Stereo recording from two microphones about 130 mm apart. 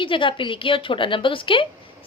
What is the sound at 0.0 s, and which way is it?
A woman's voice, 40° left (ahead or behind).